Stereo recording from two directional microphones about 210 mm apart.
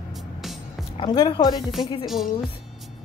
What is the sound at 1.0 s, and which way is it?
Speech, 20° left (ahead or behind).